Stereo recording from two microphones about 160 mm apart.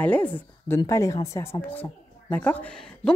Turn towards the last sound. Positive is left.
turn(degrees=10)  # may be behind; listen again after turning